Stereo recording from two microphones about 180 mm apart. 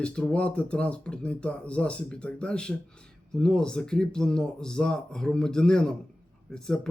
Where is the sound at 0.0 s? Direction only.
5° left (ahead or behind).